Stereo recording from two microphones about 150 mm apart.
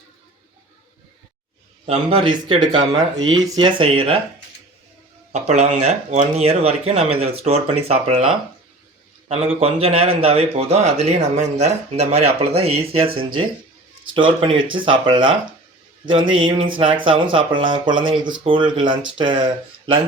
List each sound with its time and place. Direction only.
1.9 s speech: 35° right (ahead or behind)
3.8 s speech: 35° right (ahead or behind)
5.3 s speech: 45° right (ahead or behind)
9.6 s speech: 40° right (ahead or behind)